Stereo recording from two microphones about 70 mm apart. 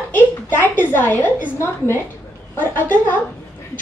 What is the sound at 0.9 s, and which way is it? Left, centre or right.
A woman's voice, left.